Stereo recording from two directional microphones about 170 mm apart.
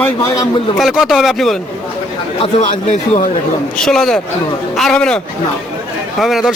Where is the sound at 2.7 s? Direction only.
50° left (ahead or behind).